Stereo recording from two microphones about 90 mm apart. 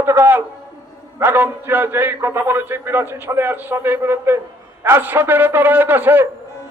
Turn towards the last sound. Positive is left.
turn(degrees=-25)  # may be behind; listen again after turning